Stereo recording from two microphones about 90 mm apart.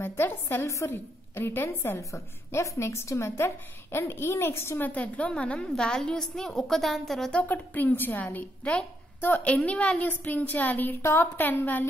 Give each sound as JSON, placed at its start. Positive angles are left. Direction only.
{"t": 0.0, "sound": "a woman's voice", "side_deg": 25}
{"t": 7.4, "sound": "a woman's voice", "side_deg": 20}